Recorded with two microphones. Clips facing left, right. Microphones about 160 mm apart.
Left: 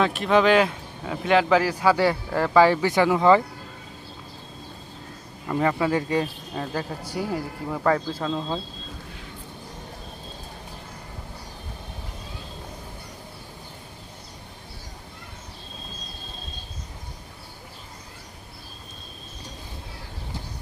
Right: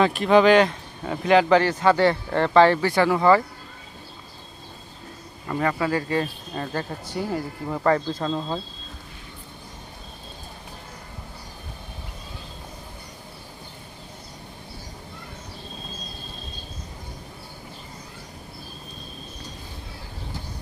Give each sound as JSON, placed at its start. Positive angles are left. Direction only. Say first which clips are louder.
{"t": 0.0, "sound": "speech", "louder": "right 3 dB", "side_deg": 0}
{"t": 5.5, "sound": "speech", "louder": "left 1 dB", "side_deg": 15}
{"t": 6.5, "sound": "speech", "louder": "even", "side_deg": 5}